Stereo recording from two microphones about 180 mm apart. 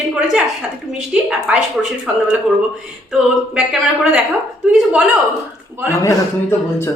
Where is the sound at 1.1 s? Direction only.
5° right (ahead or behind).